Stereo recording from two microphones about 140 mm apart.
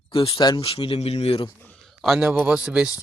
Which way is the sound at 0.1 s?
40° left (ahead or behind).